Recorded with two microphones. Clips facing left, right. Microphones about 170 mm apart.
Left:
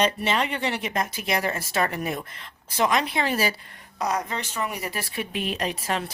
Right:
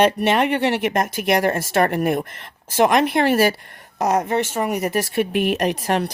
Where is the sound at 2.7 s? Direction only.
65° right (ahead or behind); by 5.1 s 45° right (ahead or behind).